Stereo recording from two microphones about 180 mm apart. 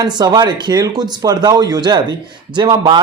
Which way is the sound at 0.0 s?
25° right (ahead or behind).